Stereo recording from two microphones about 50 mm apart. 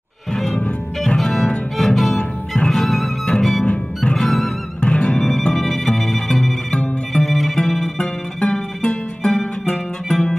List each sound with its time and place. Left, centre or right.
0.5 s music: left
1.0 s music: centre
4.7 s music: left
5.5 s music: centre
6.7 s music: centre
7.2 s music: centre
8.0 s music: centre